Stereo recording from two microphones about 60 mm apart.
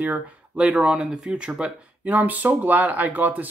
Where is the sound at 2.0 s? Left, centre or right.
Right.